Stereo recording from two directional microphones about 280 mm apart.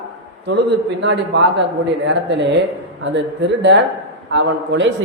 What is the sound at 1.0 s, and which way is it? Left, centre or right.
Speech, right.